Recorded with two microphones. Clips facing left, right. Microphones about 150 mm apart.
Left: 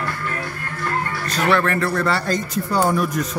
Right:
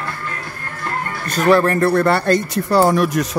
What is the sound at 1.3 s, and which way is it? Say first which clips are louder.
Speech: right 5 dB; 40° right (ahead or behind).